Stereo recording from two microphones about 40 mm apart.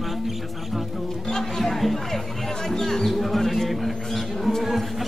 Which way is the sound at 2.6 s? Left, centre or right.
Centre.